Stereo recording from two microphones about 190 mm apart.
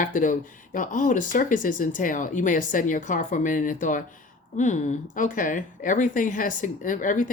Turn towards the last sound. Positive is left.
turn(degrees=45)  # may be behind; listen again after turning